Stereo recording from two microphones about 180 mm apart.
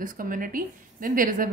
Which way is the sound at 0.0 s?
50° right (ahead or behind).